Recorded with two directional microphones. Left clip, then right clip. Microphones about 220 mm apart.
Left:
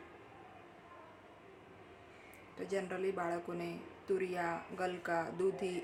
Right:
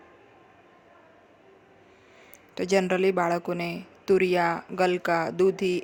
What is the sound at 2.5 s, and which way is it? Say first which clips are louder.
Speech: right 15 dB; 40° right (ahead or behind).